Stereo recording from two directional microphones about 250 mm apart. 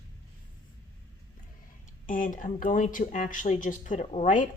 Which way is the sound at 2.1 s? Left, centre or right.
Left.